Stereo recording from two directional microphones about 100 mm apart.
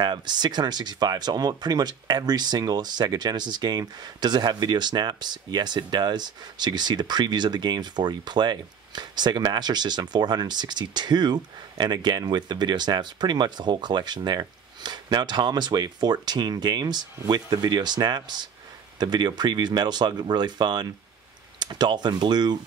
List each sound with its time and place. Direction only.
0.0 s speech: 45° right (ahead or behind)